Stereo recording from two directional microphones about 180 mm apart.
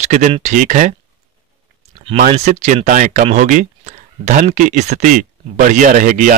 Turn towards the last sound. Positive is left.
turn(degrees=-45)  # may be behind; listen again after turning